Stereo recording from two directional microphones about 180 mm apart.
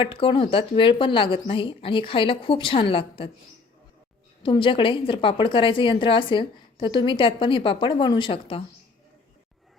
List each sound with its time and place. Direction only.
0.0 s a woman's voice: 25° left (ahead or behind)
4.4 s a woman's voice: 25° left (ahead or behind)